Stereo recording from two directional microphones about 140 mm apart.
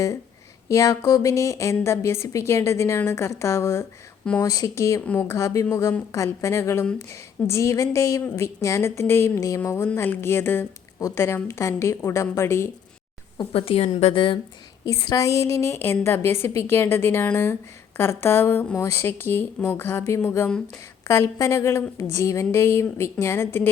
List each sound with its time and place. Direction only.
0.7 s speech: 25° left (ahead or behind)
13.5 s a woman's voice: 45° left (ahead or behind)
14.8 s a woman's voice: 25° left (ahead or behind)